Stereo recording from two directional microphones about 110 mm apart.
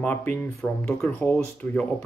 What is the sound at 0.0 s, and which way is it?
Speech, 15° left (ahead or behind).